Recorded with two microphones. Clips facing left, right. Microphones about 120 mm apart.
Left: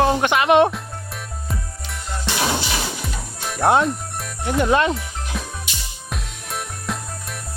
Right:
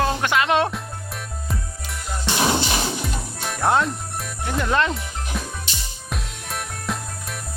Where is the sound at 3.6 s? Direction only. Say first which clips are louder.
Left 3 dB; 20° left (ahead or behind).